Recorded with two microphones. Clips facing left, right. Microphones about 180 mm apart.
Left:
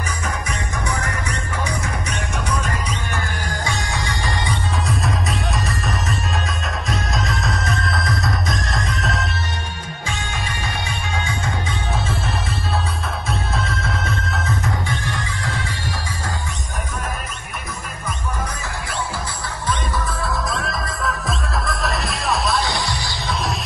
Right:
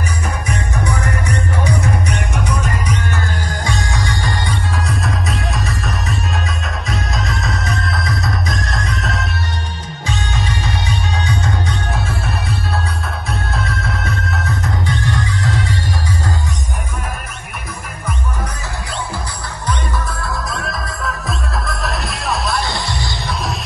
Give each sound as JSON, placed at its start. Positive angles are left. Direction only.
{"t": 2.0, "sound": "music", "side_deg": -60}
{"t": 3.6, "sound": "music", "side_deg": 20}
{"t": 4.8, "sound": "music", "side_deg": 0}
{"t": 11.9, "sound": "music", "side_deg": 0}
{"t": 20.1, "sound": "music", "side_deg": 0}
{"t": 22.8, "sound": "music", "side_deg": -20}